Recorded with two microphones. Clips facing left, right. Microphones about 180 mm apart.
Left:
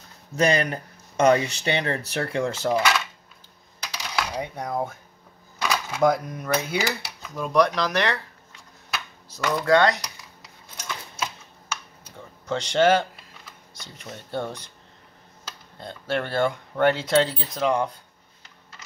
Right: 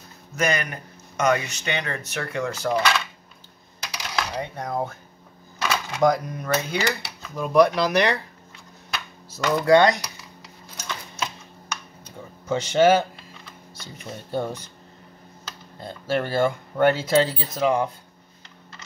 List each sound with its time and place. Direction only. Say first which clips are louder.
0.4 s speech: left 3 dB; 30° left (ahead or behind)
3.8 s coin: even; centre (ahead or behind)
4.4 s speech: right 1 dB; 10° left (ahead or behind); by 8.2 s 15° right (ahead or behind)
8.9 s a sound: even; centre (ahead or behind)
9.5 s speech: right 3 dB; 10° right (ahead or behind)
12.4 s speech: right 2 dB; 10° right (ahead or behind)
14.0 s speech: right 3 dB; 10° right (ahead or behind)
15.8 s speech: right 2 dB; 5° right (ahead or behind)